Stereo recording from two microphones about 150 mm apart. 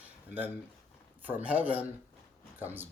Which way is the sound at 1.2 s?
10° right (ahead or behind).